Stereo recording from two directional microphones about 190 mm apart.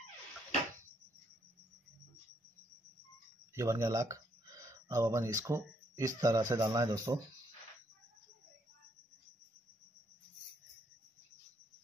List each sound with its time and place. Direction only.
3.5 s speech: 15° right (ahead or behind)